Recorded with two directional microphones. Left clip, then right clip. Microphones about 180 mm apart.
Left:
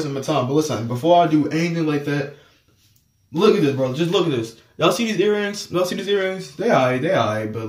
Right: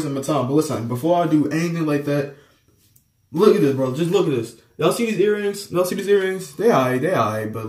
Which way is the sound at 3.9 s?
15° left (ahead or behind).